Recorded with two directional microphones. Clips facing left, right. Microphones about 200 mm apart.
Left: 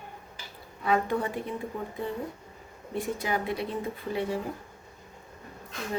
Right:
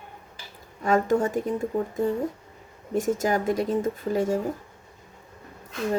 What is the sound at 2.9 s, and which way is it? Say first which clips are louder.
Speech: right 7 dB; 45° right (ahead or behind).